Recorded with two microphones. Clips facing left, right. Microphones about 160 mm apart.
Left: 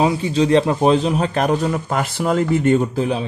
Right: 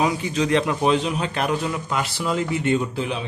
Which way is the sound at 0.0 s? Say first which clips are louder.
Left 5 dB; 30° left (ahead or behind).